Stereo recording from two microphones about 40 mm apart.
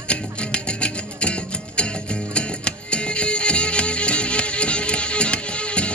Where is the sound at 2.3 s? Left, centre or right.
Left.